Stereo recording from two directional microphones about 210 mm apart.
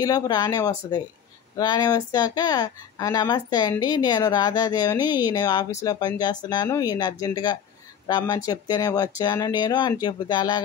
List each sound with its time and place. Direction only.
0.0 s speech: 20° left (ahead or behind)